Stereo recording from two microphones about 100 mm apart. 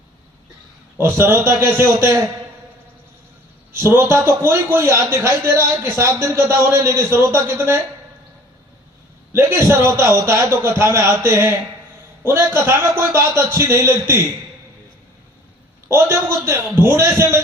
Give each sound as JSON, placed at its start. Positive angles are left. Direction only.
{"t": 0.9, "sound": "a man's voice", "side_deg": -25}
{"t": 3.9, "sound": "a man's voice", "side_deg": -25}
{"t": 9.3, "sound": "a man's voice", "side_deg": -25}
{"t": 15.9, "sound": "a man's voice", "side_deg": -25}